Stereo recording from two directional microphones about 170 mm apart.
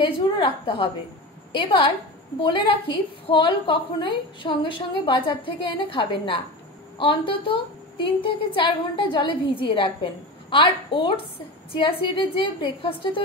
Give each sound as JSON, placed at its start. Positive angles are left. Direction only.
{"t": 0.0, "sound": "a woman's voice", "side_deg": 30}